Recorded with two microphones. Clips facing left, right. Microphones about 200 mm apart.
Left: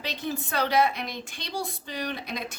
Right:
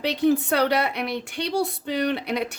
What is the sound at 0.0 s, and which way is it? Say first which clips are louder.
Speech: right 12 dB; 70° right (ahead or behind).